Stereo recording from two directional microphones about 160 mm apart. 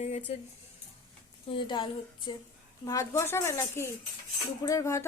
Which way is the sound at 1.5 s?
30° left (ahead or behind).